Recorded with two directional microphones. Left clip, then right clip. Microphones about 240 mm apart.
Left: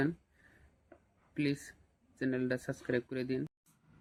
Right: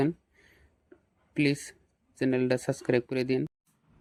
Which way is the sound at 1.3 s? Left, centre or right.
Right.